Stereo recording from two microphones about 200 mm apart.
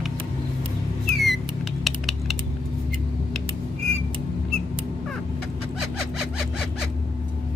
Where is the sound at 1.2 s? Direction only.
Centre (ahead or behind).